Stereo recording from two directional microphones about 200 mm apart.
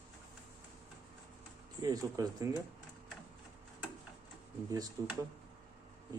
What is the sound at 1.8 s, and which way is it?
Speech, 20° right (ahead or behind).